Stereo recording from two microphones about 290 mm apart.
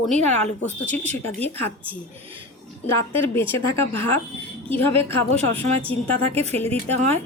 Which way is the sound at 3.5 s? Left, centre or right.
Centre.